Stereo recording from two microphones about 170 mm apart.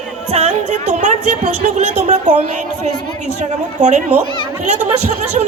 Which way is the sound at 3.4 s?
45° right (ahead or behind).